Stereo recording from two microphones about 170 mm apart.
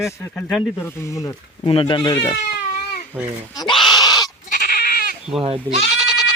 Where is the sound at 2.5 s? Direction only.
55° left (ahead or behind).